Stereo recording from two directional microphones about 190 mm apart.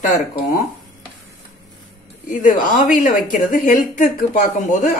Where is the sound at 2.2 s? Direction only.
45° left (ahead or behind).